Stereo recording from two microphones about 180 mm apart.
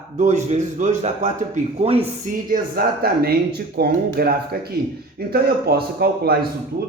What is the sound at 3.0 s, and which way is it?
A man's voice, 60° right (ahead or behind).